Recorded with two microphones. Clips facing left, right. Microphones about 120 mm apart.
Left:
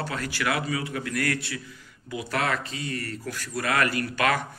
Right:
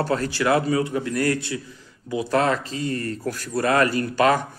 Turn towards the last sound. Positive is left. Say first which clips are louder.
# right 6 dB
turn(degrees=-30)  # may be behind; listen again after turning